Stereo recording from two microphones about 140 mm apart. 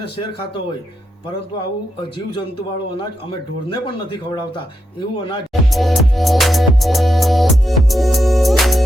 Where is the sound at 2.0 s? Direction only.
35° left (ahead or behind).